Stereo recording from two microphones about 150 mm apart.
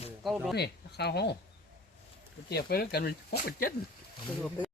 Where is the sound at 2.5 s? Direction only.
90° left.